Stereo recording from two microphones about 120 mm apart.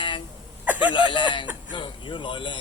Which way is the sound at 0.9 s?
40° left (ahead or behind).